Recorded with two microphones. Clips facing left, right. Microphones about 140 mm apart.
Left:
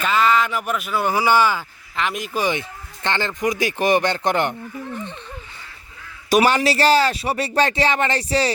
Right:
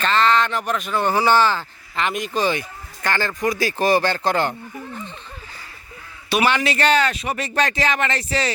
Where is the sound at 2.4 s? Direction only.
20° left (ahead or behind).